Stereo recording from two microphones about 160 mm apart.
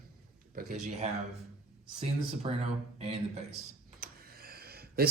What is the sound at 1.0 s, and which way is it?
Speech, 45° right (ahead or behind).